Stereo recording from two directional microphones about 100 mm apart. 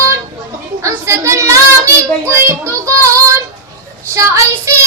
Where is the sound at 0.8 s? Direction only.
30° right (ahead or behind).